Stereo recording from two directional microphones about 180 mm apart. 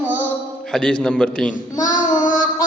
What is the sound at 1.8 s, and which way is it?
Child singing, 45° left (ahead or behind).